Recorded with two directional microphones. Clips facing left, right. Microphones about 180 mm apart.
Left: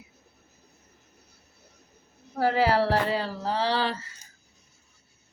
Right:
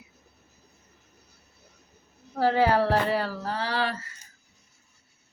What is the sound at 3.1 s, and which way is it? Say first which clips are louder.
Speech: even; 20° left (ahead or behind).